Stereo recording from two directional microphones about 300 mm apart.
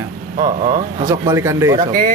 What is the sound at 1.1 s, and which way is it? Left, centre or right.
Speech, centre.